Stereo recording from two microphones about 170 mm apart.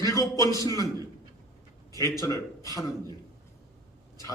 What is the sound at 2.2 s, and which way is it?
Speech, 20° left (ahead or behind).